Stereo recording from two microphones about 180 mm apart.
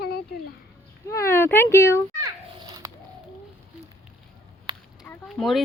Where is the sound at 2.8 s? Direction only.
20° right (ahead or behind).